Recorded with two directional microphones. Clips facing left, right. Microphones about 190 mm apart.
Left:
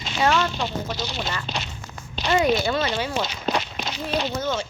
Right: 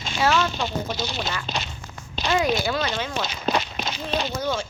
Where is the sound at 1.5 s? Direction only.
40° right (ahead or behind).